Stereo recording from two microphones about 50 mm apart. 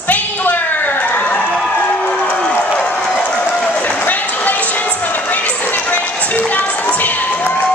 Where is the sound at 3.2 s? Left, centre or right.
Centre.